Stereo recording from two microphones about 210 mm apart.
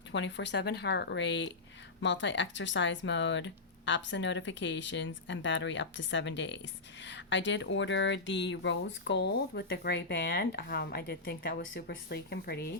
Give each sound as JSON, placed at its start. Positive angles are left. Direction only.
{"t": 0.1, "sound": "speech", "side_deg": 60}